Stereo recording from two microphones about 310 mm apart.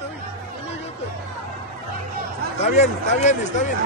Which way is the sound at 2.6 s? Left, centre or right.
Left.